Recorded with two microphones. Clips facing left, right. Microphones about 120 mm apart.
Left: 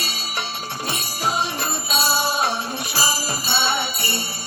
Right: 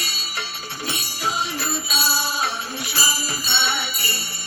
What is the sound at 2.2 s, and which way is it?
Music, 55° left (ahead or behind).